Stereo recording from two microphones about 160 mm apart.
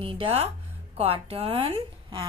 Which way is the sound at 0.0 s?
35° right (ahead or behind).